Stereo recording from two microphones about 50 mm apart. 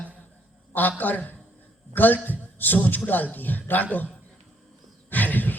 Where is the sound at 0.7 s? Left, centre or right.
Left.